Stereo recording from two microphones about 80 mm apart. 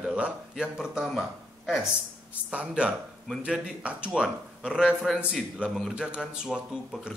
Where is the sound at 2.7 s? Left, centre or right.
Centre.